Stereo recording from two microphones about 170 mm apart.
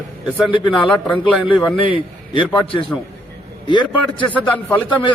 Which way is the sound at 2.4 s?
5° left (ahead or behind).